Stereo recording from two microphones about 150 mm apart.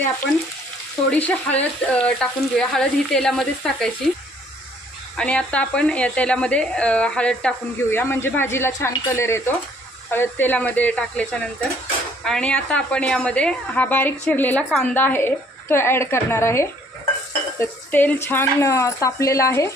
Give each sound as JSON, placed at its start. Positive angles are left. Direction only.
{"t": 1.1, "sound": "speech", "side_deg": 10}
{"t": 5.1, "sound": "a woman's voice", "side_deg": 5}